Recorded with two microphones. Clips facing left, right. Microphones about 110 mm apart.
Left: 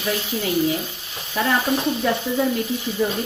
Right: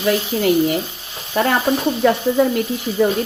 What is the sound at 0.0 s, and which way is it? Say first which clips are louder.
Speech: right 7 dB; 70° right (ahead or behind).